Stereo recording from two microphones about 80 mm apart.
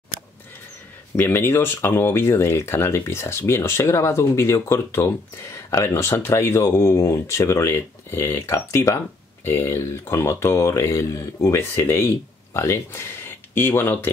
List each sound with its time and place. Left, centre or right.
1.1 s speech: left